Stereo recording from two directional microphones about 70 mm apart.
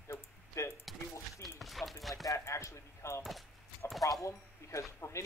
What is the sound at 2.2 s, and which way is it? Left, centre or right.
Speech, left.